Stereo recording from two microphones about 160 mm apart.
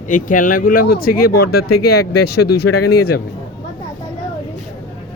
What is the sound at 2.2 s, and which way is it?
Speech, 90° left.